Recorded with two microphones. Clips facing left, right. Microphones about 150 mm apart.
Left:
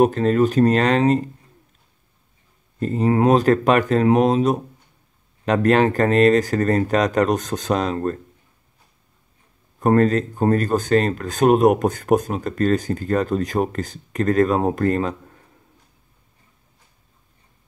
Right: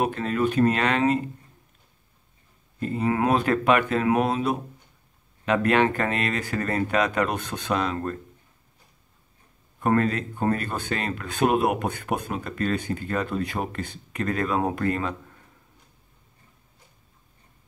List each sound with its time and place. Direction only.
0.0 s speech: 40° left (ahead or behind)
2.8 s speech: 35° left (ahead or behind)
9.8 s speech: 40° left (ahead or behind)